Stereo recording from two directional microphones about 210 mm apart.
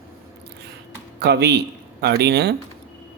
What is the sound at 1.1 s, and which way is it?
Speech, 50° right (ahead or behind).